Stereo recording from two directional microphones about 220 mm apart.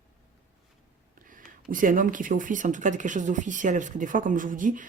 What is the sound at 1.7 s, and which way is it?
Speech, 40° right (ahead or behind).